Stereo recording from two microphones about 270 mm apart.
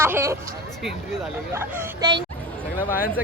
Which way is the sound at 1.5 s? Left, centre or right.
Centre.